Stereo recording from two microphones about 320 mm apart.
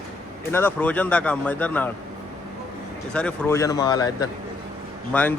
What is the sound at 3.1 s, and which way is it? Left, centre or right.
A man's voice, centre.